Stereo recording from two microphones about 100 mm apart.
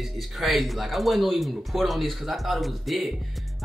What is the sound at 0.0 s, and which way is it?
Speech, centre (ahead or behind).